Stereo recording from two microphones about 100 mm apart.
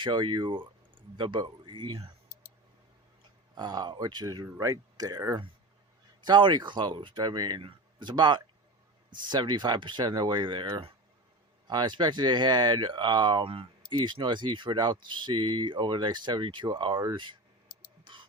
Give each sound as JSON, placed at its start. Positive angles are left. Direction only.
{"t": 0.0, "sound": "a man's voice", "side_deg": -50}
{"t": 3.5, "sound": "speech", "side_deg": -45}
{"t": 6.2, "sound": "speech", "side_deg": -50}
{"t": 11.7, "sound": "speech", "side_deg": -45}
{"t": 18.0, "sound": "a sound", "side_deg": -55}